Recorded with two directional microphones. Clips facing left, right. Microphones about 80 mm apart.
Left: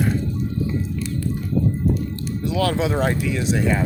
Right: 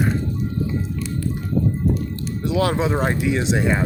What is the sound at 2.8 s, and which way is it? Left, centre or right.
Speech, centre.